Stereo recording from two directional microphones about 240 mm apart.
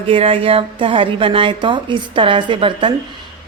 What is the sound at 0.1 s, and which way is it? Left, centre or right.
A woman's voice, right.